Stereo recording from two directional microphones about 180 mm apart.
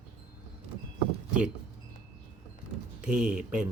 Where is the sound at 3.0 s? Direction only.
5° right (ahead or behind).